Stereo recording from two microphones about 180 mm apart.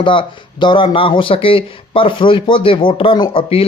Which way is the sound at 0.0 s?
25° left (ahead or behind).